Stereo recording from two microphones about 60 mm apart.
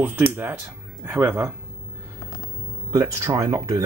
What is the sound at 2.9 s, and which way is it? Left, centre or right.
Speech, right.